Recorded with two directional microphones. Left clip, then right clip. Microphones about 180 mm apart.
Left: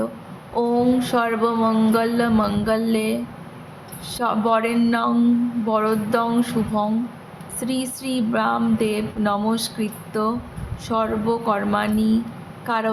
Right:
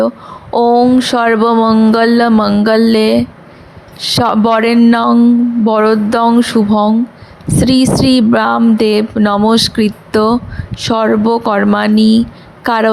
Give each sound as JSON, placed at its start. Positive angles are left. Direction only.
{"t": 0.5, "sound": "speech", "side_deg": -50}